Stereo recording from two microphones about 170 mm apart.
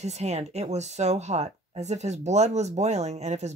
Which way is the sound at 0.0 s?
40° right (ahead or behind).